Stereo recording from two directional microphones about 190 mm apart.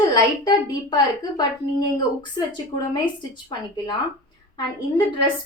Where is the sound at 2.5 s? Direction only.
20° left (ahead or behind).